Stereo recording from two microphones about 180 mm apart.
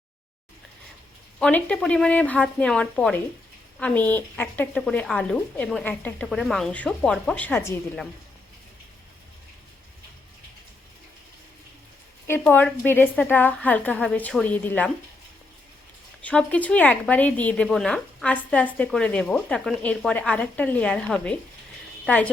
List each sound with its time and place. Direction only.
1.4 s a woman's voice: 10° left (ahead or behind)
12.3 s a woman's voice: 10° left (ahead or behind)
16.2 s a woman's voice: 5° left (ahead or behind)